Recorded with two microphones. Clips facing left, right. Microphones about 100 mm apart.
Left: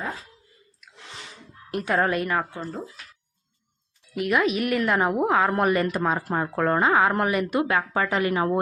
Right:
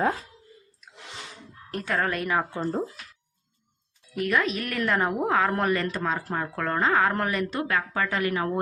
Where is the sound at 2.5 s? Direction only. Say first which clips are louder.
Right 5 dB; 30° right (ahead or behind).